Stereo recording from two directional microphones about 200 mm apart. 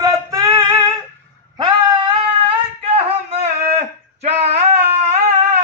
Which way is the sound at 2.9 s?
30° right (ahead or behind).